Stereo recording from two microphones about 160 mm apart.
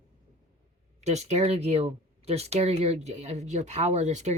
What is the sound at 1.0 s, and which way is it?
Speech, 45° right (ahead or behind).